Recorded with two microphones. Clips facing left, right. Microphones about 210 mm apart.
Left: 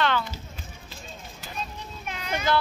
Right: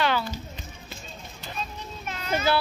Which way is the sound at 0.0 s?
10° right (ahead or behind).